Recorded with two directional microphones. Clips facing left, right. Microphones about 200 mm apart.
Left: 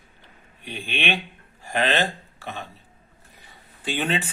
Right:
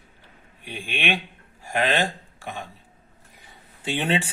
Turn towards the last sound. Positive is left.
turn(degrees=-30)  # may be behind; listen again after turning